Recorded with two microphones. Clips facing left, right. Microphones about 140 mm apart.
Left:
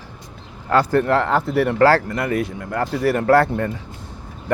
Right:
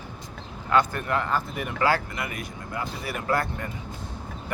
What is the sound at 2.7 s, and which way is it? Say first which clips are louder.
Speech: left 12 dB; 70° left (ahead or behind).